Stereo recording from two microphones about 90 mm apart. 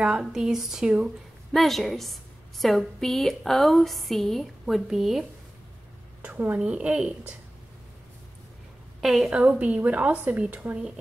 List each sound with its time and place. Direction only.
0.0 s a woman's voice: 10° right (ahead or behind)
6.2 s a woman's voice: 20° right (ahead or behind)
9.0 s a woman's voice: 5° right (ahead or behind)
9.4 s a woman's voice: 15° right (ahead or behind)